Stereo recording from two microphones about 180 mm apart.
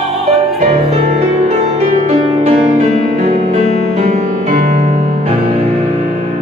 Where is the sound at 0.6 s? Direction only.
40° right (ahead or behind).